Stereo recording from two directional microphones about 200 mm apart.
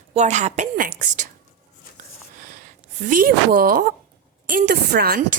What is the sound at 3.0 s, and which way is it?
A woman's voice, 45° right (ahead or behind).